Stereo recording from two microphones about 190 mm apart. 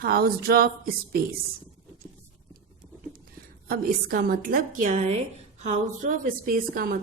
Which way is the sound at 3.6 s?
50° right (ahead or behind).